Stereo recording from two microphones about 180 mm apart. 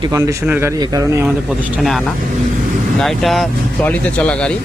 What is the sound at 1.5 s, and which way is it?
Speech, 5° right (ahead or behind).